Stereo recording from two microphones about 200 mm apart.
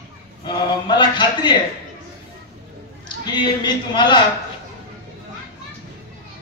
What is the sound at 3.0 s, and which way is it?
A man's voice, 20° left (ahead or behind).